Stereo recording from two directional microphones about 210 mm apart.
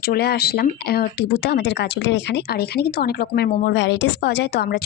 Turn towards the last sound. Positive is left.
turn(degrees=50)  # may be behind; listen again after turning